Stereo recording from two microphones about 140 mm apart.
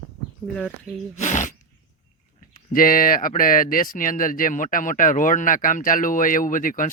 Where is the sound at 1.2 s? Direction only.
60° left (ahead or behind).